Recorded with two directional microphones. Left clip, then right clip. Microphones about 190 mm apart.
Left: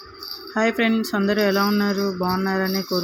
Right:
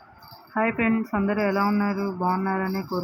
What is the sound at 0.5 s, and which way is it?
Speech, 30° left (ahead or behind).